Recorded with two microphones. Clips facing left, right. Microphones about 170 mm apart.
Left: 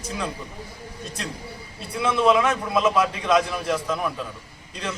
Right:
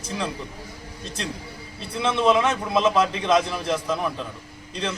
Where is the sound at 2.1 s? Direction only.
Centre (ahead or behind).